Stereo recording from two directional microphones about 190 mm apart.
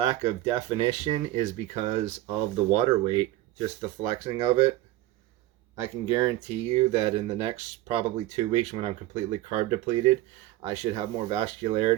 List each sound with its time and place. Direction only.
0.1 s speech: 30° right (ahead or behind)
5.8 s speech: 30° right (ahead or behind)